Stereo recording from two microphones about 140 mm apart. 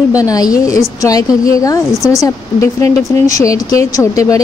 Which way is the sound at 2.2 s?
20° left (ahead or behind).